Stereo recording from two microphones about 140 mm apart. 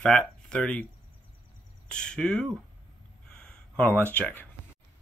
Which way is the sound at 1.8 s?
5° left (ahead or behind).